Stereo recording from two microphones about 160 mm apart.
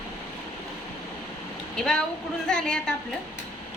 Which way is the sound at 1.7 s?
5° left (ahead or behind).